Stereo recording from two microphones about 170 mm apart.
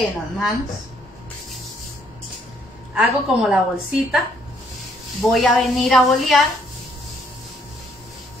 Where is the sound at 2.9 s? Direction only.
5° right (ahead or behind).